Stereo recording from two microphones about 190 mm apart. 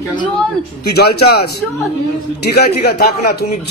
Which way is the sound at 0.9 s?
55° left (ahead or behind).